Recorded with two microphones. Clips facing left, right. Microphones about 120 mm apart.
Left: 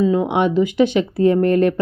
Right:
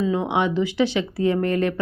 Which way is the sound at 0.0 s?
45° left (ahead or behind).